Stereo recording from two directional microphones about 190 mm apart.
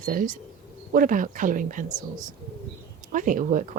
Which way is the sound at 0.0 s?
45° right (ahead or behind).